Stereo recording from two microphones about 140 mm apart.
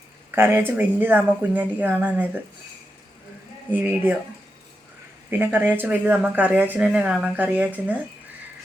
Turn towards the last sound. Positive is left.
turn(degrees=-10)  # may be behind; listen again after turning